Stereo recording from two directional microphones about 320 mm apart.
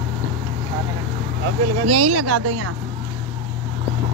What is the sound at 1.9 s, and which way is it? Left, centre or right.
Speech, right.